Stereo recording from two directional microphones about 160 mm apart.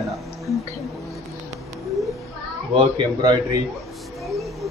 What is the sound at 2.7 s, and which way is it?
Speech, 25° right (ahead or behind).